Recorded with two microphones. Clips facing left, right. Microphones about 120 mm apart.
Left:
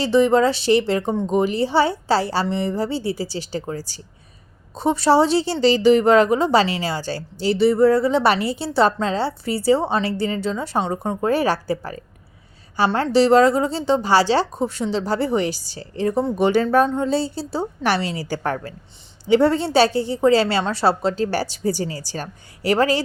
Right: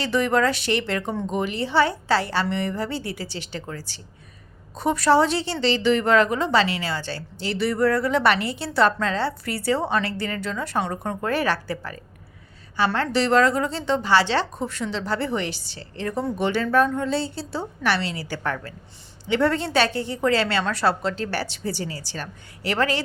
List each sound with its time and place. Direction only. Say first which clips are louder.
0.0 s a woman's voice: left 5 dB; 30° left (ahead or behind)
11.3 s a woman's voice: left 5 dB; 35° left (ahead or behind)
16.0 s a woman's voice: left 6 dB; 25° left (ahead or behind)
16.4 s a woman's voice: left 4 dB; 40° left (ahead or behind)
16.8 s a woman's voice: left 3 dB; 25° left (ahead or behind)